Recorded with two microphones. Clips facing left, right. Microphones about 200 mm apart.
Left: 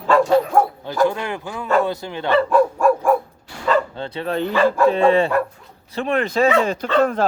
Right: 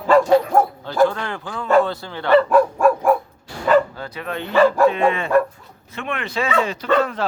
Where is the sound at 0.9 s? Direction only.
15° left (ahead or behind).